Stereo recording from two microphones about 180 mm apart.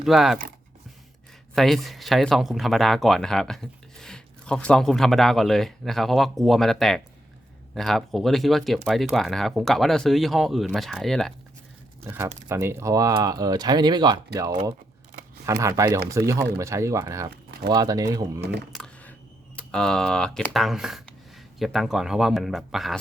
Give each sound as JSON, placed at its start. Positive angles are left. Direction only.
{"t": 0.0, "sound": "speech", "side_deg": 0}
{"t": 1.5, "sound": "speech", "side_deg": 0}
{"t": 12.0, "sound": "speech", "side_deg": -15}
{"t": 15.4, "sound": "speech", "side_deg": -20}
{"t": 18.7, "sound": "a sound", "side_deg": 5}
{"t": 19.5, "sound": "speech", "side_deg": 5}